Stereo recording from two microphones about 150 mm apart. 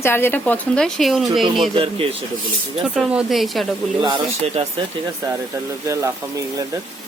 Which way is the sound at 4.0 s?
30° right (ahead or behind).